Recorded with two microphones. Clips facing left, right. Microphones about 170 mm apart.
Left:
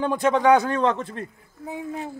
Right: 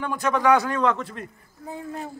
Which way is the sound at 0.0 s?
25° left (ahead or behind).